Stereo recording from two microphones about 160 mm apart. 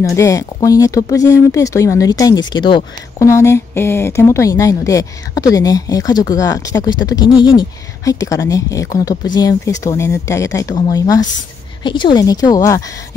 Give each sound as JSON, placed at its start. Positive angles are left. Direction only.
{"t": 0.0, "sound": "speech", "side_deg": 20}